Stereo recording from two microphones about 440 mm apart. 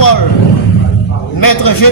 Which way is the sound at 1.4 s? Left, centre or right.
Left.